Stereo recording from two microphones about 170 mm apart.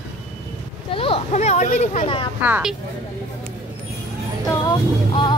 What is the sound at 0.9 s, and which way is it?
Speech, 35° left (ahead or behind).